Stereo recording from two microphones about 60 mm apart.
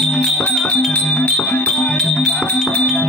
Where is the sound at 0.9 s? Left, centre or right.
Left.